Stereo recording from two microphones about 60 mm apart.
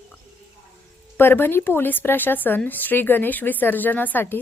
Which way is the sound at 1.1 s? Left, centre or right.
Left.